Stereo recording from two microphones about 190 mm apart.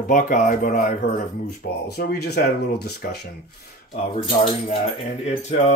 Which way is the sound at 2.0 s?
55° left (ahead or behind).